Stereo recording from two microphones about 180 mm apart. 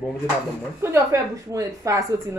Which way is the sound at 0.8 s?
15° right (ahead or behind).